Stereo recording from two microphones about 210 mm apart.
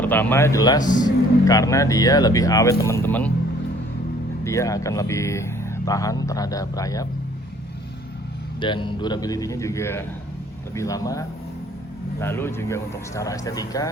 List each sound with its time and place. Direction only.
0.0 s speech: 10° left (ahead or behind)
4.4 s speech: 15° left (ahead or behind)
8.6 s speech: 20° left (ahead or behind)